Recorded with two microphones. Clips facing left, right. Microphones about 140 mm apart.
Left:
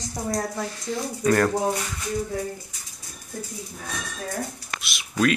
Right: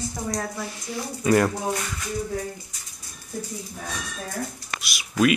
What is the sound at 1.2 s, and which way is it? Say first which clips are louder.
Speech: right 1 dB; 10° right (ahead or behind).